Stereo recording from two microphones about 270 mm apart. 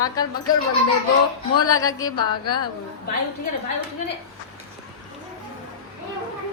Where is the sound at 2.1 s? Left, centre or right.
Left.